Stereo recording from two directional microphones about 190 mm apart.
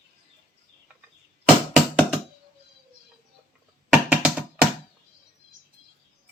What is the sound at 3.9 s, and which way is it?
Music, 5° right (ahead or behind).